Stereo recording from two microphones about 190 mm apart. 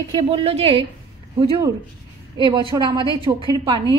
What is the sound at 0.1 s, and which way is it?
Speech, 30° right (ahead or behind).